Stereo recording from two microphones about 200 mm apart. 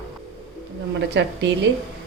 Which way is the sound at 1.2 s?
65° right (ahead or behind).